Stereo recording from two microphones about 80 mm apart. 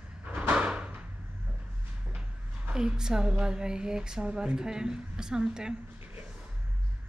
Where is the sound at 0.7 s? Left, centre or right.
Centre.